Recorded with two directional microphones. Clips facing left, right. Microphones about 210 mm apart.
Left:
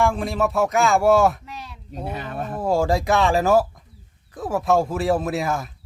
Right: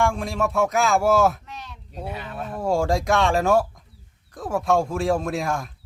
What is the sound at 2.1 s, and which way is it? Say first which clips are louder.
Speech: left 5 dB; 50° left (ahead or behind).